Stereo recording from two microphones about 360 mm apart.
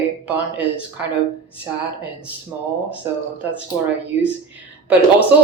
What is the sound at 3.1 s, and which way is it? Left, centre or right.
Speech, centre.